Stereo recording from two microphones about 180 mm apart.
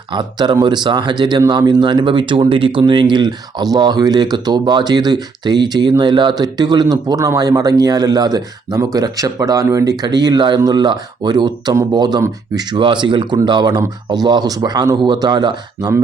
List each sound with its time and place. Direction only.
0.1 s speech: 25° right (ahead or behind)